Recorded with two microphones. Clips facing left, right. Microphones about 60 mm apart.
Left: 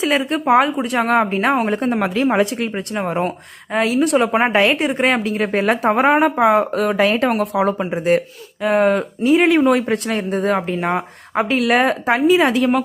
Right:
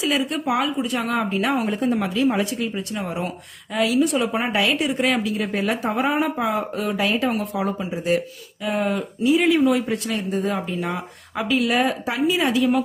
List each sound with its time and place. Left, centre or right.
0.0 s a woman's voice: left
4.0 s a woman's voice: left